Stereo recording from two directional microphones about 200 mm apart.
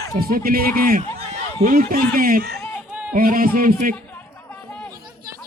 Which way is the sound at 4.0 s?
10° left (ahead or behind).